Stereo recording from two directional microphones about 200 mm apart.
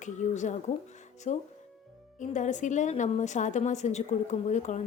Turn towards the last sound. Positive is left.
turn(degrees=35)  # may be behind; listen again after turning